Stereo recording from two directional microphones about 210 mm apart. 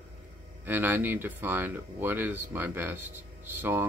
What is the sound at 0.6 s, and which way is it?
Speech, 10° right (ahead or behind).